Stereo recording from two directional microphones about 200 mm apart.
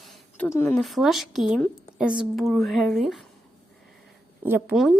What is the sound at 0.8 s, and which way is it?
A woman's voice, centre (ahead or behind).